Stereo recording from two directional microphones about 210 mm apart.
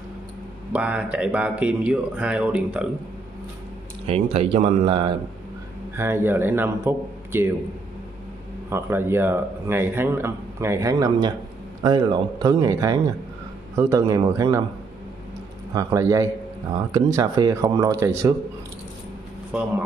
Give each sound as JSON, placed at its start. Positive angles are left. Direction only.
{"t": 0.7, "sound": "speech", "side_deg": -5}
{"t": 4.1, "sound": "speech", "side_deg": -30}
{"t": 5.9, "sound": "speech", "side_deg": -10}
{"t": 8.6, "sound": "speech", "side_deg": -10}
{"t": 15.7, "sound": "speech", "side_deg": -15}